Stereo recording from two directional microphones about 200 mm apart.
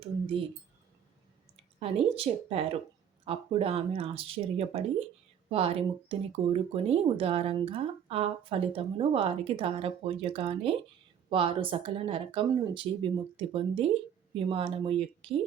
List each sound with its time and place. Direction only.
1.8 s speech: 30° right (ahead or behind)